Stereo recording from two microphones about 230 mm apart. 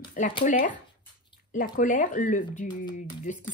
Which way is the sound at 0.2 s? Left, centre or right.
Left.